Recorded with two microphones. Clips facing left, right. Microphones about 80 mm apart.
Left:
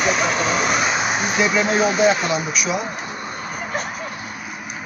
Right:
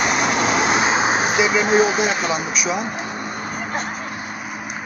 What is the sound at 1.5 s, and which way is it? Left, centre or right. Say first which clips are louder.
Speech: right 2 dB; centre.